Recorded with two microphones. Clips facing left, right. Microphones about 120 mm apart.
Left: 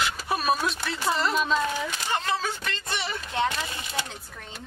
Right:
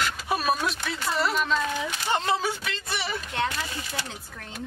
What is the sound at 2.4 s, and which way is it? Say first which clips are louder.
Speech: right 2 dB; 10° right (ahead or behind).